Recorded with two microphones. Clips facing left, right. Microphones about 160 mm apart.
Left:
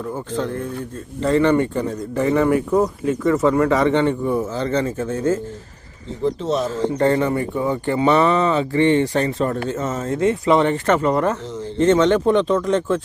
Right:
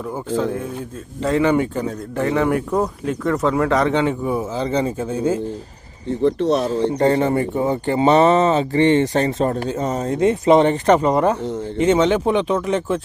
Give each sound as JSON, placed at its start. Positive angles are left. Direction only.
{"t": 0.3, "sound": "speech", "side_deg": -10}
{"t": 6.1, "sound": "speech", "side_deg": -65}
{"t": 6.9, "sound": "speech", "side_deg": -20}
{"t": 9.6, "sound": "speech", "side_deg": -15}